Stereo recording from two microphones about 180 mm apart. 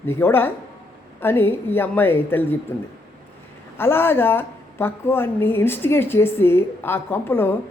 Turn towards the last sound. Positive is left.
turn(degrees=10)  # may be behind; listen again after turning